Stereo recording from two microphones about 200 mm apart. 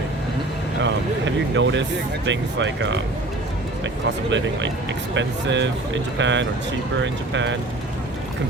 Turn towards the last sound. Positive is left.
turn(degrees=-65)  # may be behind; listen again after turning